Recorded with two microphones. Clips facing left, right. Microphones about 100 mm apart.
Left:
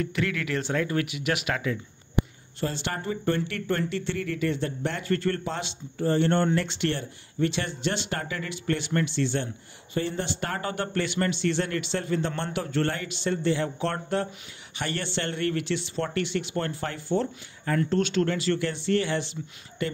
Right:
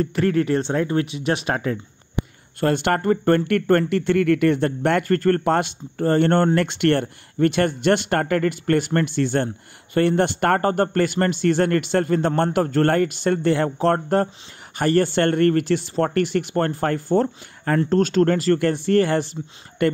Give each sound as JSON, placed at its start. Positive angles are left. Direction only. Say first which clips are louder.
{"t": 0.0, "sound": "speech", "louder": "right 9 dB", "side_deg": -40}
{"t": 2.6, "sound": "speech", "louder": "right 11 dB", "side_deg": -60}
{"t": 9.9, "sound": "speech", "louder": "right 10 dB", "side_deg": -60}
{"t": 13.7, "sound": "speech", "louder": "right 9 dB", "side_deg": -45}